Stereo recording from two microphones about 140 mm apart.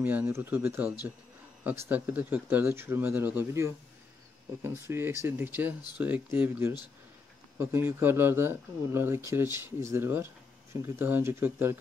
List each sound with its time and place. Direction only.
0.0 s speech: 15° right (ahead or behind)